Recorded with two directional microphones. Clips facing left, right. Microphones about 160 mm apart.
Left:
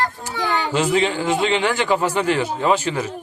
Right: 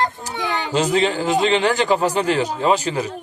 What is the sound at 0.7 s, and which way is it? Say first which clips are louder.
Speech: right 2 dB; 40° right (ahead or behind).